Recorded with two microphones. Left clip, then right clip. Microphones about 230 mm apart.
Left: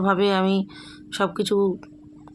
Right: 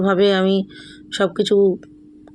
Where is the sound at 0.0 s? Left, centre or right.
Centre.